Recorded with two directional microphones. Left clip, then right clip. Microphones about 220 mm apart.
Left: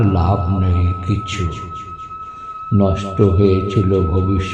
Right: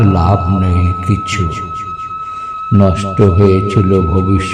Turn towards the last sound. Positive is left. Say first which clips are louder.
# right 5 dB
turn(degrees=-30)  # may be behind; listen again after turning